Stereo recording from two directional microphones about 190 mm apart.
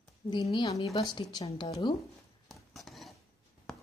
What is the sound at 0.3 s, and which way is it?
A woman's voice, 25° left (ahead or behind).